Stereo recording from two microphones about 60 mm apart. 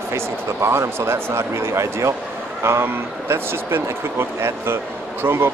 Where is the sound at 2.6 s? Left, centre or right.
Right.